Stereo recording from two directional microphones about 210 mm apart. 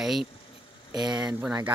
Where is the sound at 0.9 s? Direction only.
20° right (ahead or behind).